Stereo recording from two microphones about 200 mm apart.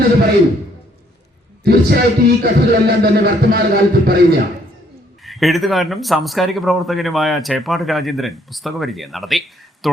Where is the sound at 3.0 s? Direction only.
50° right (ahead or behind).